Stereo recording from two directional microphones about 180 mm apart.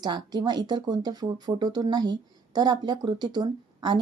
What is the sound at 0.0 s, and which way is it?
Speech, 25° right (ahead or behind).